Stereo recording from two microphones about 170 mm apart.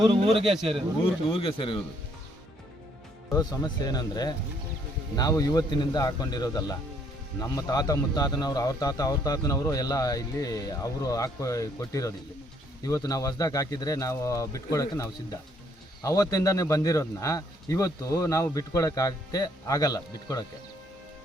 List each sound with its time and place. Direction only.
0.0 s speech: 30° right (ahead or behind)
0.4 s speech: centre (ahead or behind)
1.3 s speech: 30° left (ahead or behind)
3.3 s a man's voice: 25° left (ahead or behind)